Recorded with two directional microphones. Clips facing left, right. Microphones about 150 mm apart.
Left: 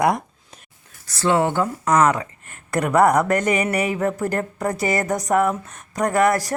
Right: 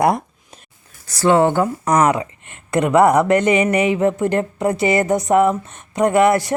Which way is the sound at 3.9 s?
20° right (ahead or behind).